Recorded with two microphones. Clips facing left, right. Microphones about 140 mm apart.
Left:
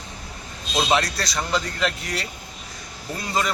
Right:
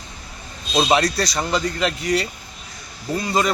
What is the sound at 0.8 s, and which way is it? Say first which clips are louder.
Speech: right 4 dB; 10° right (ahead or behind).